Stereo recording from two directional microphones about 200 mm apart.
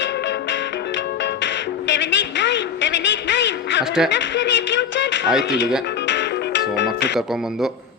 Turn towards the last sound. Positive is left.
turn(degrees=0)  # may be behind; listen again after turning